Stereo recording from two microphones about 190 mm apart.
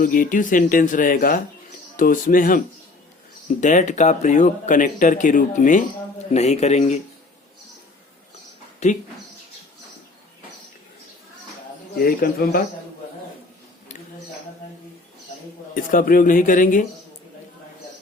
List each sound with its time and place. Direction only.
0.0 s speech: 45° left (ahead or behind)
3.6 s speech: 40° left (ahead or behind)
8.8 s speech: 35° left (ahead or behind)
11.9 s speech: 50° left (ahead or behind)
15.7 s speech: 45° left (ahead or behind)